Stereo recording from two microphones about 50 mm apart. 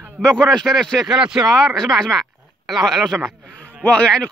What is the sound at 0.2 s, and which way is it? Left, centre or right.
Speech, centre.